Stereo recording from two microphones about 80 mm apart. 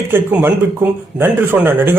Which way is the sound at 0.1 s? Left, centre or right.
Right.